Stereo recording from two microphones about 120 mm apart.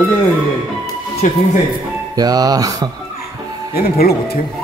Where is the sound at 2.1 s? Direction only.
35° right (ahead or behind).